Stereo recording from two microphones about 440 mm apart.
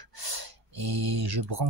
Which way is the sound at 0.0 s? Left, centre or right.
Right.